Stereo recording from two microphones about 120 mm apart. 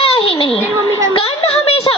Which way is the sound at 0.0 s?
50° left (ahead or behind).